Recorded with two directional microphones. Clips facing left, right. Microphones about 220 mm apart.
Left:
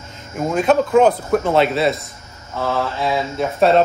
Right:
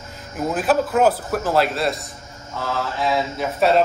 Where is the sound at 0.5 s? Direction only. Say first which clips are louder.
Left 4 dB; 5° right (ahead or behind).